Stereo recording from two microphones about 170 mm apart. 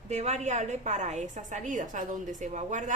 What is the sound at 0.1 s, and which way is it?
A woman's voice, 40° right (ahead or behind).